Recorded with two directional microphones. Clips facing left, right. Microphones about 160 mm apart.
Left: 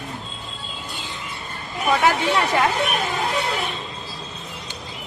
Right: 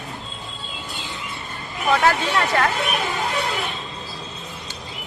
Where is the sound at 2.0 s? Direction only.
15° left (ahead or behind).